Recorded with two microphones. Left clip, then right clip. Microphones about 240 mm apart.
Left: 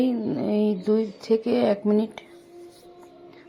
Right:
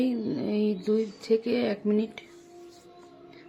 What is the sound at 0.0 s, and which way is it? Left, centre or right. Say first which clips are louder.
Speech: left 4 dB; centre.